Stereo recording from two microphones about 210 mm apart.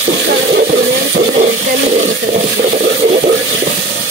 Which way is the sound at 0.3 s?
50° right (ahead or behind).